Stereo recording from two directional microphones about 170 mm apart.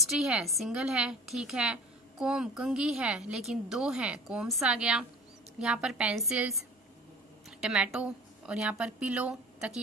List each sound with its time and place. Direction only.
0.0 s a woman's voice: centre (ahead or behind)
7.6 s a woman's voice: 5° right (ahead or behind)